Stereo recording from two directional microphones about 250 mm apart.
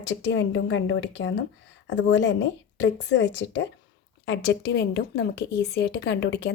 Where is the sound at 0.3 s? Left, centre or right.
Left.